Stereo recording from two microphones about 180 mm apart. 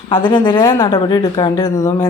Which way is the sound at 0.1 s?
25° left (ahead or behind).